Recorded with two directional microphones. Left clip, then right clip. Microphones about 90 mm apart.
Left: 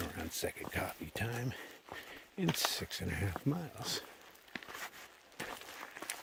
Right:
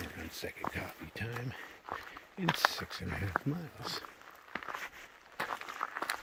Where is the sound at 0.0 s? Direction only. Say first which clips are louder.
Left 2 dB; 35° left (ahead or behind).